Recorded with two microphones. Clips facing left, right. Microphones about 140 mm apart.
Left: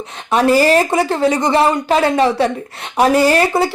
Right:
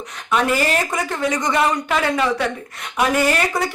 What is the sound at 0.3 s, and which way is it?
Speech, 35° left (ahead or behind).